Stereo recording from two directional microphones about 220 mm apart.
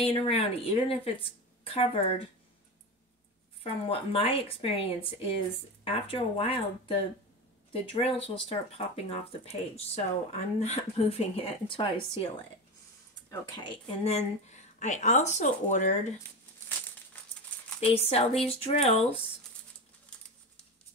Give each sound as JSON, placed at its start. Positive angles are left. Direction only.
{"t": 0.0, "sound": "speech", "side_deg": 25}
{"t": 3.6, "sound": "speech", "side_deg": 25}
{"t": 13.3, "sound": "speech", "side_deg": 20}
{"t": 17.7, "sound": "speech", "side_deg": 30}